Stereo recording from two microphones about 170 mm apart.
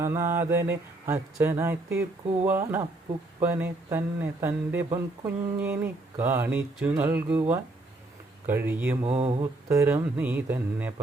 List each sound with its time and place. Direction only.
0.0 s speech: 15° right (ahead or behind)
9.0 s mantra: 40° right (ahead or behind)
9.4 s speech: 15° right (ahead or behind)